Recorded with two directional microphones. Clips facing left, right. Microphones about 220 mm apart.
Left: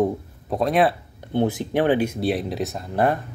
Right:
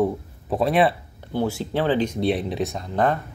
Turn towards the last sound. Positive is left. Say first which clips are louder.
# left 1 dB
turn(degrees=5)  # may be behind; listen again after turning